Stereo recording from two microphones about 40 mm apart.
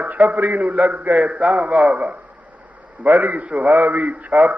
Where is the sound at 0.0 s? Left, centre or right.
Right.